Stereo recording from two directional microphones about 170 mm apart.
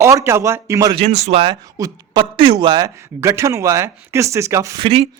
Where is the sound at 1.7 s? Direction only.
20° right (ahead or behind).